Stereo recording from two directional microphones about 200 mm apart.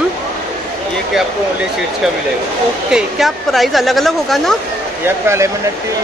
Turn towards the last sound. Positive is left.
turn(degrees=-15)  # may be behind; listen again after turning